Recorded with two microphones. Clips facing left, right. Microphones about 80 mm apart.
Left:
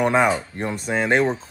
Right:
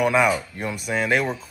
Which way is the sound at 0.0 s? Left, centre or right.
Left.